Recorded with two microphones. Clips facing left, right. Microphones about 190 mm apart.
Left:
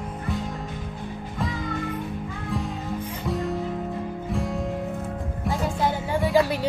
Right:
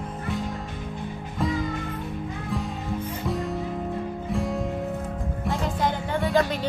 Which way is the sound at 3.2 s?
Centre (ahead or behind).